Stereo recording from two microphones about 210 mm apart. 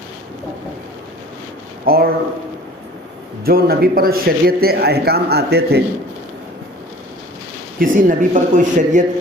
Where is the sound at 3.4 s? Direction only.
45° right (ahead or behind).